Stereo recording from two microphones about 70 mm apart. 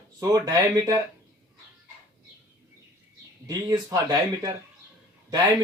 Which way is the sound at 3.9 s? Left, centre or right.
Right.